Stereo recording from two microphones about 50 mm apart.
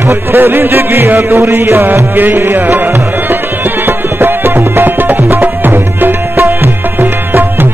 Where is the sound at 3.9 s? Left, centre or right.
Right.